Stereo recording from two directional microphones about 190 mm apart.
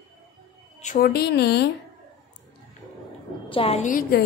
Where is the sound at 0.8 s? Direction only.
40° left (ahead or behind); by 1.7 s 60° left (ahead or behind).